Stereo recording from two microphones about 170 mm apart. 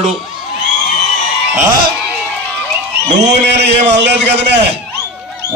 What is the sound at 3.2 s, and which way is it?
A man's voice, 85° right.